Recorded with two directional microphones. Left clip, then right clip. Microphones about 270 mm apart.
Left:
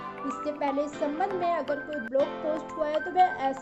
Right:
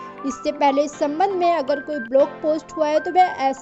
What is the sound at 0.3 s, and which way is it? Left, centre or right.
A woman's voice, right.